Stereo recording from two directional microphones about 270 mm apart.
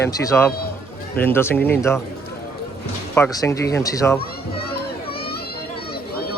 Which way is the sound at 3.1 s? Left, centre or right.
Centre.